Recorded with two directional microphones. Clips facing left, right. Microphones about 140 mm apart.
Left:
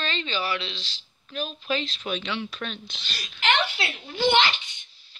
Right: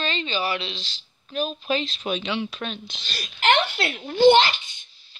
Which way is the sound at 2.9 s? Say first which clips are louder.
Right 3 dB; 40° right (ahead or behind).